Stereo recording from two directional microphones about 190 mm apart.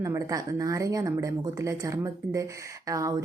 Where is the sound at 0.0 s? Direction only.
15° right (ahead or behind).